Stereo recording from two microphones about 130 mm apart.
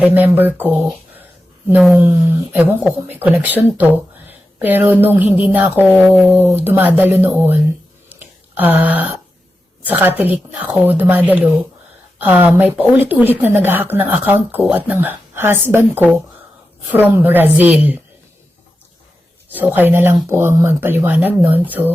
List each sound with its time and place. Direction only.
0.1 s speech: 15° right (ahead or behind)
2.0 s speech: 15° right (ahead or behind)
8.1 s a sound: 15° right (ahead or behind)
9.8 s speech: 15° right (ahead or behind)
16.9 s speech: 15° right (ahead or behind)
19.5 s speech: 15° right (ahead or behind)